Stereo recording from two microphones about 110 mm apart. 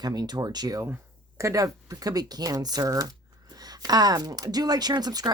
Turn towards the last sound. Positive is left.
turn(degrees=-35)  # may be behind; listen again after turning